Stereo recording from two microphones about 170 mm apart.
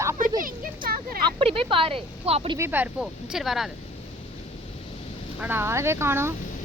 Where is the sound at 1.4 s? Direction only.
35° right (ahead or behind).